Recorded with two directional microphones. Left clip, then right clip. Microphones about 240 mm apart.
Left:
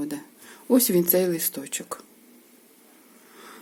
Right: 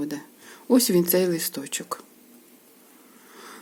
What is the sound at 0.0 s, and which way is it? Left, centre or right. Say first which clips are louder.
Speech: right 1 dB; centre.